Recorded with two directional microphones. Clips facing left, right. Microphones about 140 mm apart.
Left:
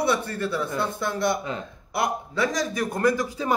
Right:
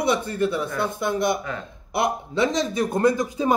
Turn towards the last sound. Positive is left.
turn(degrees=-20)  # may be behind; listen again after turning